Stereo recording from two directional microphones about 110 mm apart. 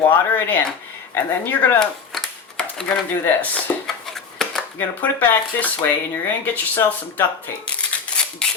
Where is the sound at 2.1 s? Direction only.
5° left (ahead or behind).